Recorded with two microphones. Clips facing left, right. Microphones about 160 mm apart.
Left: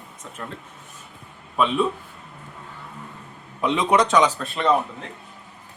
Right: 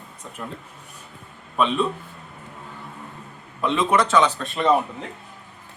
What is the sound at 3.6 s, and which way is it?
Speech, 20° left (ahead or behind).